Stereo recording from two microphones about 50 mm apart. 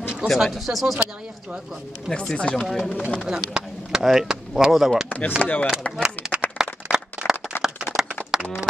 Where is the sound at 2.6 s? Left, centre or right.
Centre.